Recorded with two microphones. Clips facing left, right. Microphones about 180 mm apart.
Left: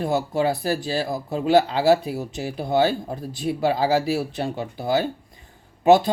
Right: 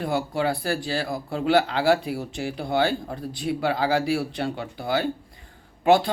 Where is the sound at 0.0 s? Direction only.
25° left (ahead or behind).